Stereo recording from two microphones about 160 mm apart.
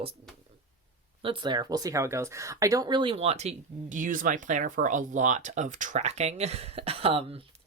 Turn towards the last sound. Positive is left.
turn(degrees=-35)  # may be behind; listen again after turning